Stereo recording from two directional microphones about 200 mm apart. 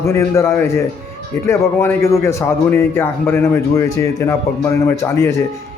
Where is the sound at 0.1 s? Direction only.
15° left (ahead or behind).